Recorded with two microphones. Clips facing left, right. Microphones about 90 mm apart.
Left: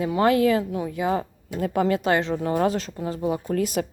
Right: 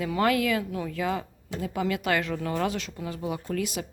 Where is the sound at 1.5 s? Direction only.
50° left (ahead or behind).